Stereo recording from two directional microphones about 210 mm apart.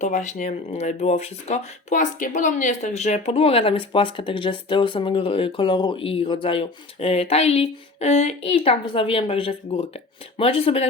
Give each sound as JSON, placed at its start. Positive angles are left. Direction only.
{"t": 0.0, "sound": "speech", "side_deg": 35}